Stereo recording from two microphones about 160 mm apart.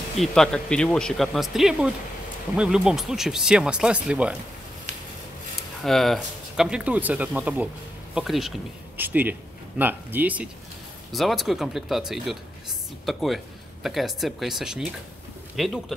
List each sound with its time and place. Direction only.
0.2 s speech: 5° left (ahead or behind)
5.9 s speech: centre (ahead or behind)
8.9 s speech: 10° right (ahead or behind)